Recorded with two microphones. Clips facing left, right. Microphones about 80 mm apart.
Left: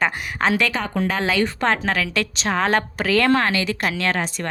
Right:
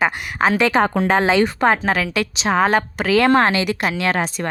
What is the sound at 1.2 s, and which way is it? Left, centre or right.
A woman's voice, centre.